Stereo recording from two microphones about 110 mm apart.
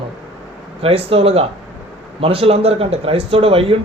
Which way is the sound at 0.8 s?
60° right (ahead or behind).